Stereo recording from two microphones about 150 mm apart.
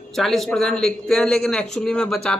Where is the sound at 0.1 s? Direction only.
Centre (ahead or behind).